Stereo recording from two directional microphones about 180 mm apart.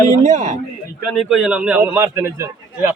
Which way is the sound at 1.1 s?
Centre (ahead or behind).